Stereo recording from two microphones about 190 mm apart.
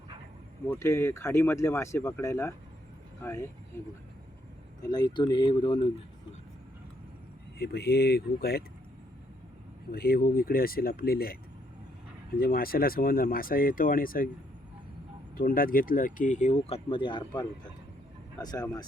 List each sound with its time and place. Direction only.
0.7 s speech: 15° left (ahead or behind)
4.8 s speech: 20° left (ahead or behind)
7.6 s speech: 55° left (ahead or behind)
9.9 s speech: 50° left (ahead or behind)
12.4 s speech: 50° left (ahead or behind)
15.4 s speech: 50° left (ahead or behind); by 18.9 s 20° left (ahead or behind)